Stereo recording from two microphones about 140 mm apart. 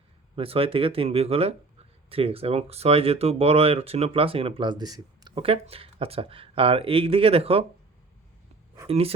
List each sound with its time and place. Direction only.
0.3 s speech: 40° right (ahead or behind)
5.4 s speech: 40° right (ahead or behind)
8.9 s speech: 45° right (ahead or behind)